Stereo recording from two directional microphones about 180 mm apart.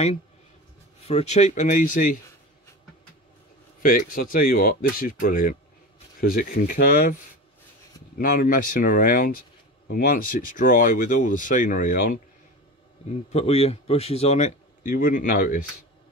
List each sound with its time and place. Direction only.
1.0 s a man's voice: 35° left (ahead or behind)
3.8 s speech: 50° left (ahead or behind)
8.2 s speech: 50° left (ahead or behind)
13.3 s a man's voice: 35° left (ahead or behind)